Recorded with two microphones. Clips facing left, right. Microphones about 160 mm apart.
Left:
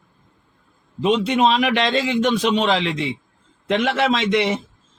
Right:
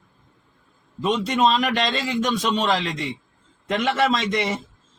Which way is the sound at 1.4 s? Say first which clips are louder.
Even; 65° left (ahead or behind).